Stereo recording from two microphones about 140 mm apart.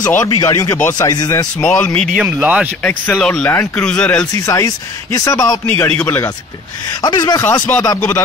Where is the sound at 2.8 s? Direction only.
10° left (ahead or behind).